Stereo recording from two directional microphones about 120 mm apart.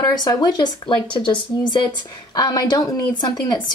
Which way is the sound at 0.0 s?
35° left (ahead or behind).